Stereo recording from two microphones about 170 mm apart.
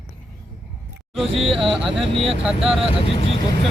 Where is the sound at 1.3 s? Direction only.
30° right (ahead or behind).